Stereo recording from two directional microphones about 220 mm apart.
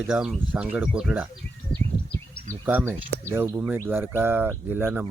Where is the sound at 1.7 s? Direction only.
50° left (ahead or behind).